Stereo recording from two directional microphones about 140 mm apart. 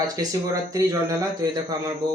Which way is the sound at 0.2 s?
25° right (ahead or behind).